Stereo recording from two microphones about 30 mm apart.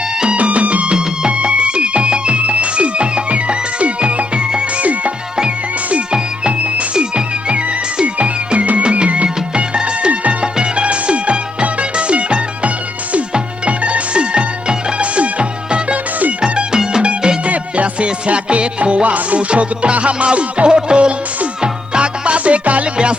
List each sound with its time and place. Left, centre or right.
0.3 s music: right
0.9 s music: right
1.4 s music: right
4.8 s music: right
6.1 s music: right
8.5 s music: right
15.1 s music: right
16.4 s music: right
17.0 s music: right
17.5 s music: right
19.5 s music: right
20.7 s music: right